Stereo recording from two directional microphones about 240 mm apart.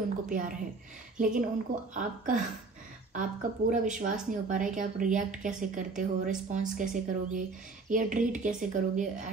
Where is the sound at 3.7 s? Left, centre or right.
Right.